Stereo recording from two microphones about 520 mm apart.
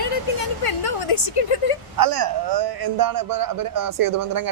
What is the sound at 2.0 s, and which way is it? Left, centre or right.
A man's voice, right.